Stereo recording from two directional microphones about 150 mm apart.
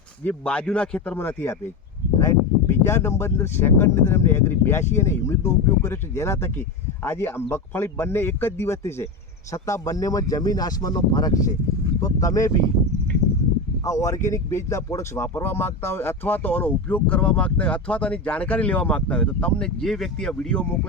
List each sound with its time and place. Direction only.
0.3 s speech: 10° left (ahead or behind)
13.8 s speech: 20° left (ahead or behind)